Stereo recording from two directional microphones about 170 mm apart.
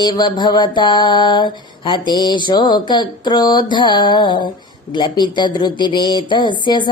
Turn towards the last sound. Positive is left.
turn(degrees=25)  # may be behind; listen again after turning